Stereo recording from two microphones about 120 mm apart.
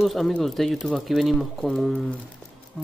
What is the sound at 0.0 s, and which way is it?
Speech, centre (ahead or behind).